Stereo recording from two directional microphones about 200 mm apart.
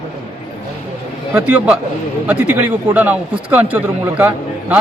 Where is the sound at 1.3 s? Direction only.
5° right (ahead or behind).